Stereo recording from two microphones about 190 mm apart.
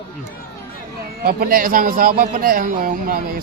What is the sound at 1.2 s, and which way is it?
Speech, 50° right (ahead or behind).